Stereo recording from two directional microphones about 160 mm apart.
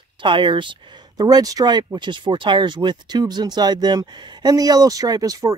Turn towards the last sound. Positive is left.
turn(degrees=-20)  # may be behind; listen again after turning